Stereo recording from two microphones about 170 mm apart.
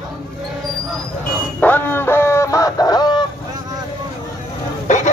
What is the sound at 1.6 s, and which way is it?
Fowl, 10° left (ahead or behind).